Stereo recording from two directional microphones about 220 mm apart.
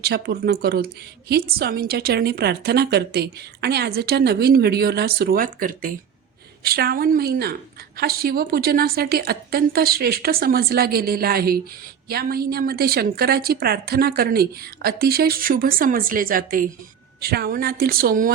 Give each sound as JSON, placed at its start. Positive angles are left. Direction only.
{"t": 0.0, "sound": "a woman's voice", "side_deg": -45}